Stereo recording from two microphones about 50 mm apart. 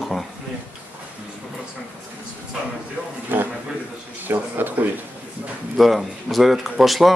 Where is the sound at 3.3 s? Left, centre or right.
Right.